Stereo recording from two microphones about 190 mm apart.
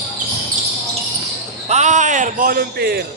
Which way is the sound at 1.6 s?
35° right (ahead or behind).